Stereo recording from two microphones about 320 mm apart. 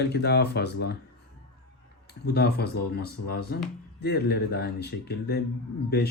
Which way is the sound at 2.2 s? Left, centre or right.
Left.